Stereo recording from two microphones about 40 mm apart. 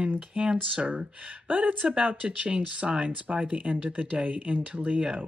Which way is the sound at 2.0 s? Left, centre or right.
Right.